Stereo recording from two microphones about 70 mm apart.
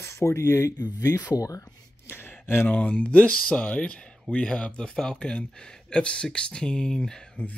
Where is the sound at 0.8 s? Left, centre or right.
Left.